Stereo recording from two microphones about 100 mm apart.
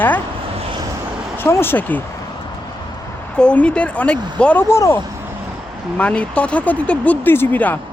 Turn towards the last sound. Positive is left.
turn(degrees=20)  # may be behind; listen again after turning